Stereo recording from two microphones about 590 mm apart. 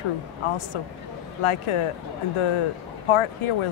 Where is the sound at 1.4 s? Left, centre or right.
Left.